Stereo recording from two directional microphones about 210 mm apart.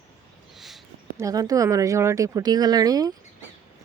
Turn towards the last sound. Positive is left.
turn(degrees=-15)  # may be behind; listen again after turning